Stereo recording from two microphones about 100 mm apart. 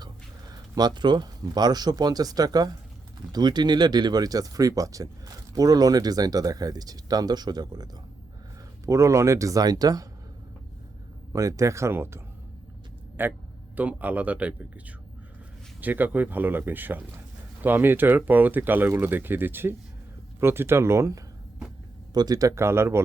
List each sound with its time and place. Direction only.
0.5 s speech: 45° right (ahead or behind)
8.9 s speech: 30° right (ahead or behind)
11.3 s speech: 30° right (ahead or behind)
22.1 s speech: 40° right (ahead or behind); by 23.0 s 25° right (ahead or behind)